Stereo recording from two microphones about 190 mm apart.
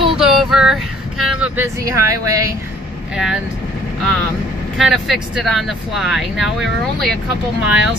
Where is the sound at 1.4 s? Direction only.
15° right (ahead or behind).